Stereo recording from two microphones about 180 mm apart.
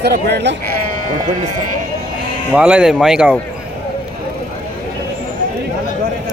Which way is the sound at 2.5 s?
5° right (ahead or behind).